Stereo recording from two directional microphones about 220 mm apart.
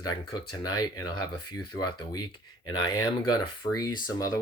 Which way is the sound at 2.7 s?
20° left (ahead or behind).